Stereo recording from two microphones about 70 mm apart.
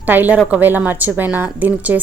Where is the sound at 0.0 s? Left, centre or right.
Right.